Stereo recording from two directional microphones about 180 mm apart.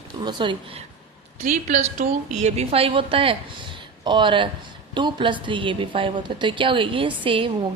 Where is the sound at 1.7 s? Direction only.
40° right (ahead or behind).